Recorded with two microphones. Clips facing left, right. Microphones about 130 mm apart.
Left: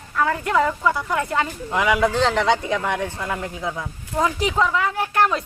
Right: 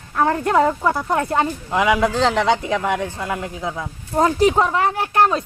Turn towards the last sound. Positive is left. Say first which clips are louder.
# right 3 dB
turn(degrees=-30)  # may be behind; listen again after turning